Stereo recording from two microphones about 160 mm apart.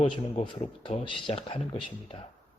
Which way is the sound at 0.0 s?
30° left (ahead or behind).